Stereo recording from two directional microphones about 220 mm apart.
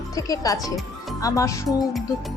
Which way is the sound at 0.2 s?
15° left (ahead or behind).